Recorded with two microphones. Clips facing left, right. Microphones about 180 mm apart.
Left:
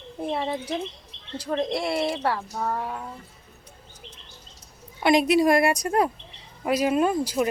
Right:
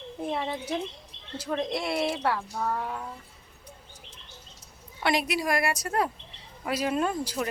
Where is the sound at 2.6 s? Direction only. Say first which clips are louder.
Left 2 dB; 15° left (ahead or behind).